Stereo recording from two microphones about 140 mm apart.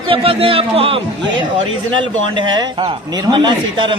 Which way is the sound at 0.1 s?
40° right (ahead or behind).